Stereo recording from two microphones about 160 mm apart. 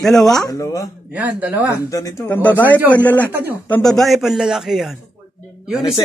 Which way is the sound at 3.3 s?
10° right (ahead or behind).